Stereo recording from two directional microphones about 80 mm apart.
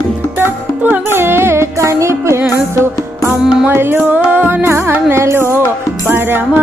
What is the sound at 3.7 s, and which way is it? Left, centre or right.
Music, right.